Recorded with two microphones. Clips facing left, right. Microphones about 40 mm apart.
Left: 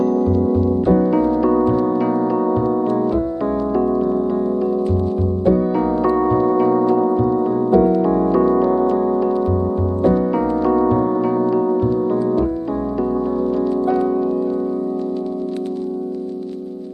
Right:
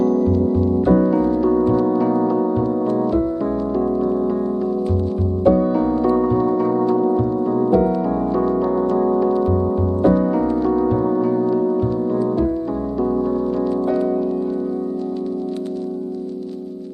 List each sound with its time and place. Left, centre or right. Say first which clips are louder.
0.0 s music: even; centre
2.6 s music: left 1 dB; left; by 4.4 s centre
5.4 s music: right 2 dB; centre
6.2 s music: left 2 dB; centre
7.2 s music: left 3 dB; left
7.5 s music: even; centre
8.4 s music: left 3 dB; left
8.6 s music: left 1 dB; centre
10.8 s music: left 2 dB; centre
11.1 s music: even; left
13.0 s music: right 1 dB; centre